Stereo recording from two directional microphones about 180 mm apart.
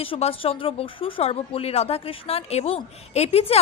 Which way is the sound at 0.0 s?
30° left (ahead or behind).